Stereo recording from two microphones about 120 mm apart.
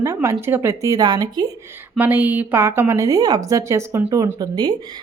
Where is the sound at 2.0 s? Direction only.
15° right (ahead or behind); by 4.8 s 35° right (ahead or behind).